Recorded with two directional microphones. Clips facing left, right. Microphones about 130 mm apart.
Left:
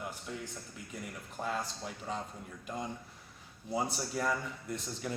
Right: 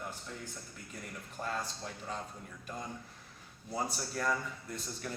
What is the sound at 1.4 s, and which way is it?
Speech, 10° left (ahead or behind).